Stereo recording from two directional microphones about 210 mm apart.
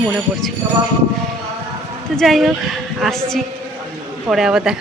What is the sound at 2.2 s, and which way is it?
A woman's voice, centre (ahead or behind).